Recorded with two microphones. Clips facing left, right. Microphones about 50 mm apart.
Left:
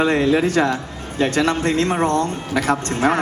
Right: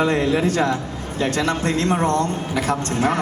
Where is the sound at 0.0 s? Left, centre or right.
Left.